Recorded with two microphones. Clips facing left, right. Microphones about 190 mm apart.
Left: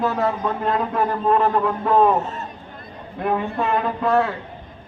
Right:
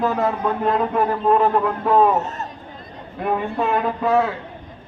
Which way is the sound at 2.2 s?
40° right (ahead or behind).